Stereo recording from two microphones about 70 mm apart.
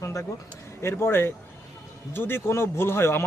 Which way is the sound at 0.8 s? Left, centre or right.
Left.